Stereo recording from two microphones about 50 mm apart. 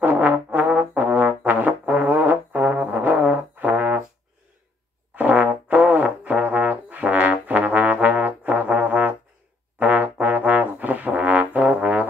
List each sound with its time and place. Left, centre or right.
0.0 s music: right
5.1 s music: right